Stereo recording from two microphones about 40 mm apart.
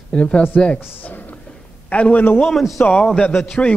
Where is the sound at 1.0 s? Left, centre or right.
Left.